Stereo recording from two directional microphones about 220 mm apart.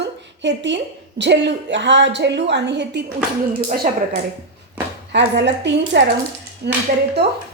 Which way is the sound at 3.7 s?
40° right (ahead or behind).